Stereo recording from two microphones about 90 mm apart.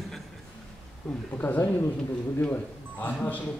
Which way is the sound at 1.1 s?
15° left (ahead or behind).